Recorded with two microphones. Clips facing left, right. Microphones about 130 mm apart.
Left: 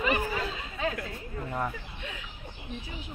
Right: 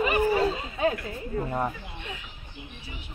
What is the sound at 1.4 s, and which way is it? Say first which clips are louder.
Speech: right 1 dB; 25° right (ahead or behind).